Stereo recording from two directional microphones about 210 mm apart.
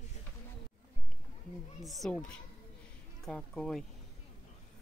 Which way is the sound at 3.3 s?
5° left (ahead or behind).